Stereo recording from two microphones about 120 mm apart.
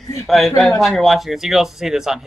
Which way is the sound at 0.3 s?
Centre (ahead or behind).